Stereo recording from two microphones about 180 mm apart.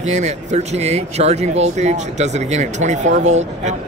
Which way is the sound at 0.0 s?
40° right (ahead or behind).